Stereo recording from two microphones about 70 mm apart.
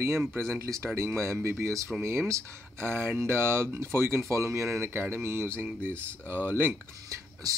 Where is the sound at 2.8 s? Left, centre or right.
Right.